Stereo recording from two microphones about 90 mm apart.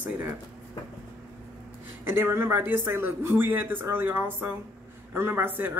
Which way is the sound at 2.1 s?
25° right (ahead or behind).